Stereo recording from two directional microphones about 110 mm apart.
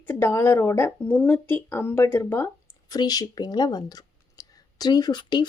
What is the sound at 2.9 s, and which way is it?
Speech, 35° left (ahead or behind).